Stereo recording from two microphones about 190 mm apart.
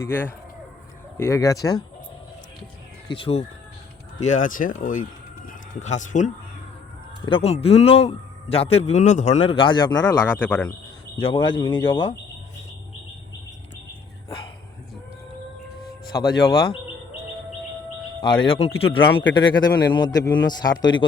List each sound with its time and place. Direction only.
0.0 s speech: 10° left (ahead or behind)
3.1 s speech: 30° left (ahead or behind)
4.2 s speech: 40° left (ahead or behind)
7.3 s speech: 30° left (ahead or behind)
10.3 s speech: 10° left (ahead or behind)
11.2 s speech: 25° left (ahead or behind)
16.5 s speech: 25° left (ahead or behind)
18.2 s speech: 25° left (ahead or behind)